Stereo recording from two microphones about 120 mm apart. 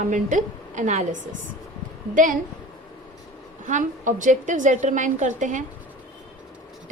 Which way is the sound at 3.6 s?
90° right.